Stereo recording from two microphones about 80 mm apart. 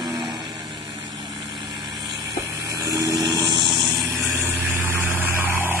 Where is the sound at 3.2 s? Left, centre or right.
Right.